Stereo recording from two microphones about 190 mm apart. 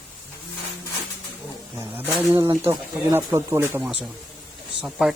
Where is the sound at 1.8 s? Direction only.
10° right (ahead or behind).